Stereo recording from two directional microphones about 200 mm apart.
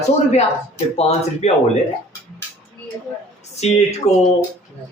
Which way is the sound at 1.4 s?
35° left (ahead or behind).